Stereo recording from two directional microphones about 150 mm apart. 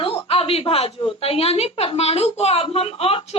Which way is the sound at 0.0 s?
40° left (ahead or behind).